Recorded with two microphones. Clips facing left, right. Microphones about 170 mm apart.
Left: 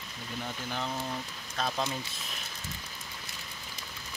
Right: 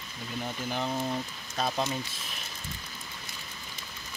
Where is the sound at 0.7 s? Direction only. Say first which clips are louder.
Right 5 dB; 15° right (ahead or behind).